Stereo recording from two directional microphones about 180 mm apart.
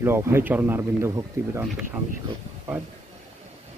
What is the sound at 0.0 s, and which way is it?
Speech, 15° right (ahead or behind).